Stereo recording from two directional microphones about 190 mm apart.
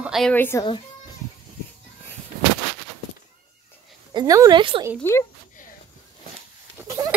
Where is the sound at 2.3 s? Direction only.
45° right (ahead or behind).